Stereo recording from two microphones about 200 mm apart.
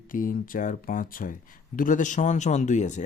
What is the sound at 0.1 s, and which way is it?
Speech, 45° left (ahead or behind).